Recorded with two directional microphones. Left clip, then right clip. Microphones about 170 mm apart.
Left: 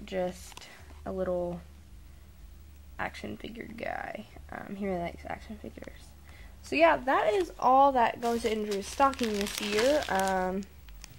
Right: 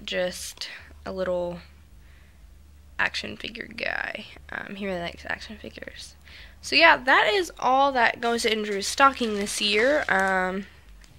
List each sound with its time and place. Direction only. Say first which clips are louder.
0.0 s speech: right 6 dB; centre (ahead or behind)
3.0 s speech: right 10 dB; centre (ahead or behind)
7.1 s speech: right 6 dB; 10° right (ahead or behind)
8.3 s speech: right 5 dB; 15° right (ahead or behind)